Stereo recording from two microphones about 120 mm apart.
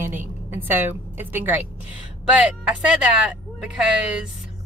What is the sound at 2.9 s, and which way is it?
Speech, 10° right (ahead or behind).